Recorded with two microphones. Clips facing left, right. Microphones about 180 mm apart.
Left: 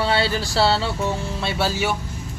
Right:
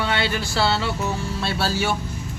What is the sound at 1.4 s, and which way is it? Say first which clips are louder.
Speech: left 1 dB; 20° left (ahead or behind).